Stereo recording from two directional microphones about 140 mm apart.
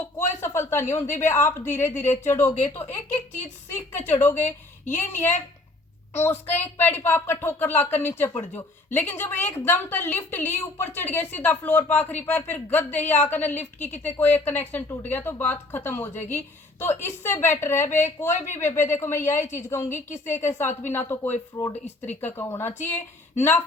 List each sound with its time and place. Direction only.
0.3 s a sound: 20° left (ahead or behind)
1.1 s a woman's voice: 15° left (ahead or behind)
3.7 s a woman's voice: 15° left (ahead or behind)